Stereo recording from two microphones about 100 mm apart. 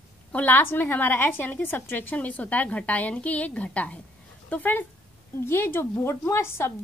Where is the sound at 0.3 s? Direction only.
15° left (ahead or behind).